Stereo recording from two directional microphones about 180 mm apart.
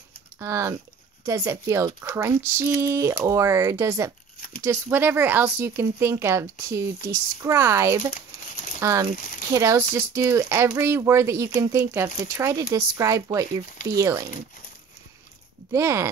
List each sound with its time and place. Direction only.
0.4 s speech: 15° right (ahead or behind)
15.7 s speech: 15° right (ahead or behind)